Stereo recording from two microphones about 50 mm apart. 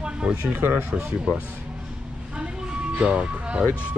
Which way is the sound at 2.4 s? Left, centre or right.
Right.